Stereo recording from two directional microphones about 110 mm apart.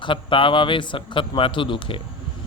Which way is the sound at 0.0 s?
50° left (ahead or behind).